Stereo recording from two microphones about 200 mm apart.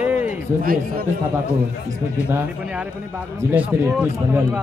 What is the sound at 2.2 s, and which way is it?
Speech, 10° right (ahead or behind).